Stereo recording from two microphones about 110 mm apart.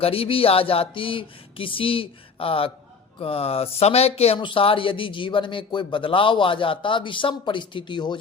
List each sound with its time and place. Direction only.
0.0 s speech: 60° left (ahead or behind)
4.4 s a man's voice: 50° left (ahead or behind)